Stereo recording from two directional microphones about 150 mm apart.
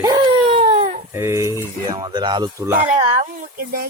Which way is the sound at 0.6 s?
40° right (ahead or behind).